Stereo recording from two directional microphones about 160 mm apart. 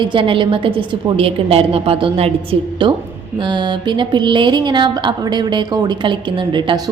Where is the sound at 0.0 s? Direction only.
30° right (ahead or behind).